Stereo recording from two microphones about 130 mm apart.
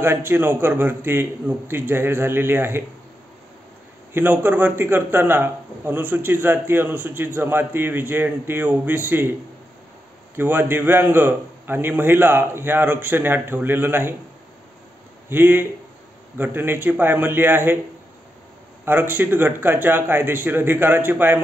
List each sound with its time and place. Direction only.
0.0 s a man's voice: 15° right (ahead or behind)
4.1 s a man's voice: 15° right (ahead or behind)
10.3 s a man's voice: 15° right (ahead or behind)
15.2 s a man's voice: 15° right (ahead or behind)
18.9 s a man's voice: 15° right (ahead or behind)